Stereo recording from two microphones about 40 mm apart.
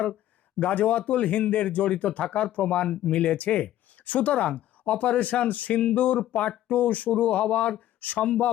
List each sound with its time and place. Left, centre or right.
0.6 s speech: left